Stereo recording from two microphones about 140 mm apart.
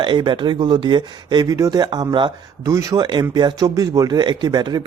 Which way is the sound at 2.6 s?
20° right (ahead or behind).